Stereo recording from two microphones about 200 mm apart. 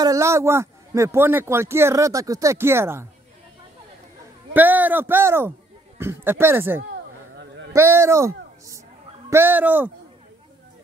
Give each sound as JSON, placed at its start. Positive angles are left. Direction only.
{"t": 0.0, "sound": "speech", "side_deg": -15}
{"t": 4.6, "sound": "speech", "side_deg": -10}
{"t": 7.3, "sound": "honk", "side_deg": -65}
{"t": 7.9, "sound": "speech", "side_deg": -15}